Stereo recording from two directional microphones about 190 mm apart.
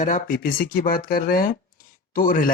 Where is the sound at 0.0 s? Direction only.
45° left (ahead or behind).